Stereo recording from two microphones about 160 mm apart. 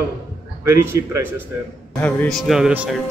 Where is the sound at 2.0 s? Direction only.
10° left (ahead or behind).